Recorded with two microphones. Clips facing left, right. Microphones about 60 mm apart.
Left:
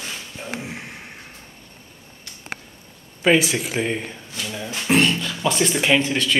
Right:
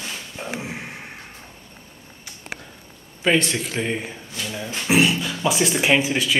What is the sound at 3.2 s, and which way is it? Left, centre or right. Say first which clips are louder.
Speech: left 2 dB; centre.